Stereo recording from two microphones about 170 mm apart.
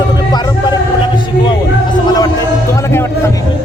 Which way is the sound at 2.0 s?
25° left (ahead or behind).